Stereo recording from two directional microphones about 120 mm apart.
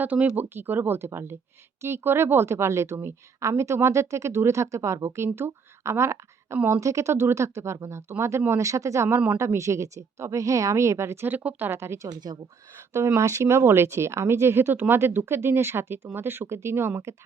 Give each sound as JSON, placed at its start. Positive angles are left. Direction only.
{"t": 0.0, "sound": "a woman's voice", "side_deg": -10}